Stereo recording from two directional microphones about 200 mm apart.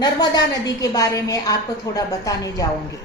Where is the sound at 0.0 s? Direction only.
20° left (ahead or behind).